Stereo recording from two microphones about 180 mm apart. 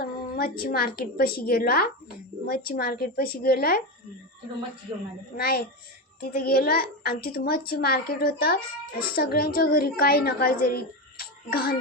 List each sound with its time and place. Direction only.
0.0 s a woman's voice: 55° left (ahead or behind)
5.4 s a woman's voice: 55° left (ahead or behind)